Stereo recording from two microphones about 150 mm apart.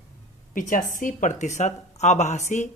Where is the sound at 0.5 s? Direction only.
60° left (ahead or behind).